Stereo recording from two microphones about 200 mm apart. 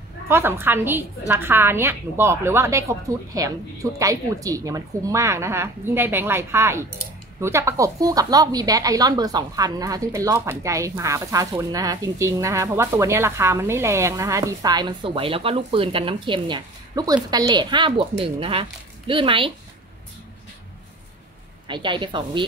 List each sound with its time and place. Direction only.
0.3 s speech: 10° right (ahead or behind)
21.6 s a woman's voice: 25° right (ahead or behind)